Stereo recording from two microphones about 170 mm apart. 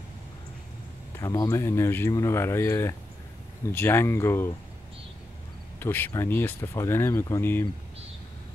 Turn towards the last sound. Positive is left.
turn(degrees=15)  # may be behind; listen again after turning